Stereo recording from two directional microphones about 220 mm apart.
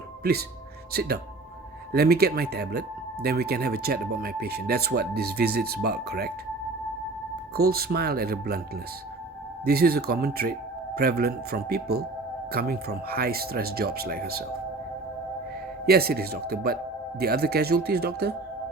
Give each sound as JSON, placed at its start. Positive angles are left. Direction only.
{"t": 0.2, "sound": "speech", "side_deg": -45}
{"t": 7.5, "sound": "speech", "side_deg": -45}
{"t": 9.6, "sound": "speech", "side_deg": -45}
{"t": 15.9, "sound": "speech", "side_deg": -45}